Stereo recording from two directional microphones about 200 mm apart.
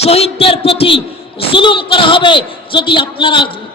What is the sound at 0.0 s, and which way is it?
A woman's voice, 30° left (ahead or behind).